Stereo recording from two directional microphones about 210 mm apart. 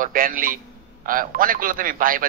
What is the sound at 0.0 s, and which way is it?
A man's voice, 40° right (ahead or behind).